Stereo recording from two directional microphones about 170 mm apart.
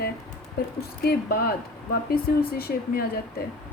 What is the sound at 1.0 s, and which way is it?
Speech, 60° left (ahead or behind).